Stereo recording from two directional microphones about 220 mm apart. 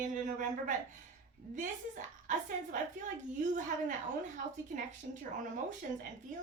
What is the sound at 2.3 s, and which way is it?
A woman's voice, 35° right (ahead or behind).